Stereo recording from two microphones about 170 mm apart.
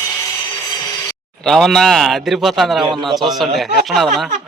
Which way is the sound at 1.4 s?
Centre (ahead or behind).